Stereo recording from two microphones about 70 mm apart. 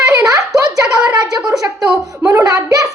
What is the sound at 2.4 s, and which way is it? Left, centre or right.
Speech, right.